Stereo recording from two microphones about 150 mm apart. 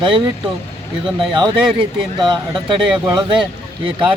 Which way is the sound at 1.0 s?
35° right (ahead or behind).